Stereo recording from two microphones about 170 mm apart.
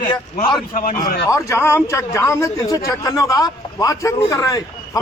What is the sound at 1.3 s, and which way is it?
A man's voice, 15° left (ahead or behind).